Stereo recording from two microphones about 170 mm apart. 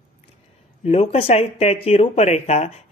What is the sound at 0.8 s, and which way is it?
Speech, 35° left (ahead or behind).